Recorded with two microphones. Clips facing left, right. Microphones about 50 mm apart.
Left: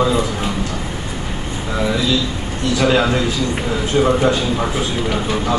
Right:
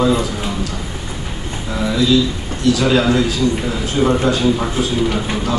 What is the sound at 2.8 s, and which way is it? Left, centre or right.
A man's voice, centre.